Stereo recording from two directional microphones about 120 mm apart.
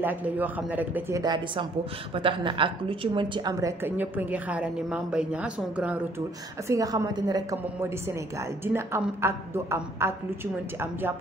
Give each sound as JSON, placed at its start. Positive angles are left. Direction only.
{"t": 0.0, "sound": "a woman's voice", "side_deg": -15}
{"t": 1.1, "sound": "a woman's voice", "side_deg": -35}
{"t": 3.6, "sound": "a woman's voice", "side_deg": -15}
{"t": 6.7, "sound": "a woman's voice", "side_deg": -30}
{"t": 7.8, "sound": "a woman's voice", "side_deg": -20}